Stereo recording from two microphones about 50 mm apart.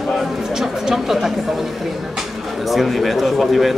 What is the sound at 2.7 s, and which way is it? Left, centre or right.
A man's voice, centre.